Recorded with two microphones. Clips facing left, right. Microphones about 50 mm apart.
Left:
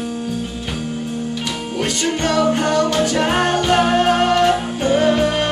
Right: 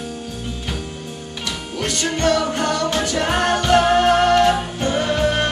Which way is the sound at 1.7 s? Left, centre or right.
Centre.